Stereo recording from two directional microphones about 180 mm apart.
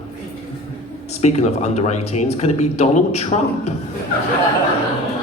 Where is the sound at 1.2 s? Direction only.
40° left (ahead or behind).